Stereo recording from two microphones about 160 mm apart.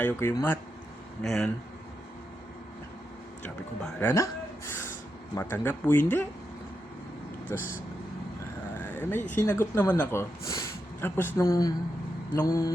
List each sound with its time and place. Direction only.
0.0 s speech: 10° left (ahead or behind)
1.2 s speech: centre (ahead or behind)
3.4 s speech: 5° left (ahead or behind)
4.1 s a sound: 15° left (ahead or behind)
5.4 s speech: 15° left (ahead or behind)
7.5 s speech: 15° left (ahead or behind)
8.8 s a sound: 15° left (ahead or behind)
9.3 s speech: 15° left (ahead or behind)
12.5 s mantra: 20° left (ahead or behind)